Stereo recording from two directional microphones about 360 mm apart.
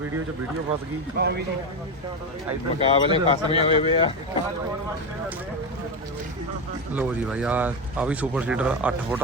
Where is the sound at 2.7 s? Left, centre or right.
Centre.